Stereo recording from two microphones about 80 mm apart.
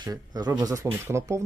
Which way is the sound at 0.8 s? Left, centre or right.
Right.